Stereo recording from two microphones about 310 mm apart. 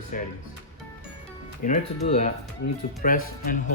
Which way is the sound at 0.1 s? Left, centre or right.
Left.